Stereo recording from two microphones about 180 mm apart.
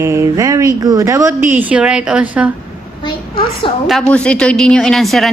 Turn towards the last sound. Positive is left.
turn(degrees=0)  # may be behind; listen again after turning